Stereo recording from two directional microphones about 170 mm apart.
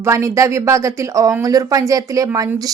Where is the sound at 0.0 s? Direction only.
15° right (ahead or behind).